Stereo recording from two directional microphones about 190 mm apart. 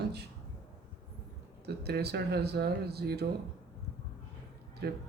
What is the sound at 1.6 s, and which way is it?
Speech, 60° right (ahead or behind).